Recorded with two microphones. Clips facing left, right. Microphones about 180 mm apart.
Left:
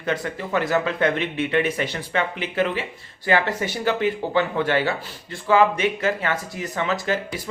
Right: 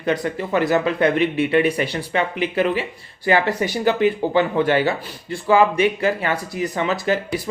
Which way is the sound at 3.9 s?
15° right (ahead or behind).